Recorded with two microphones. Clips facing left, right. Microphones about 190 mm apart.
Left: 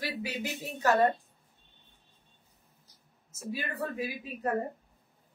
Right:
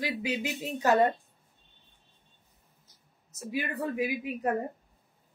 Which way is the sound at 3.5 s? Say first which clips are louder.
Right 3 dB; 15° right (ahead or behind).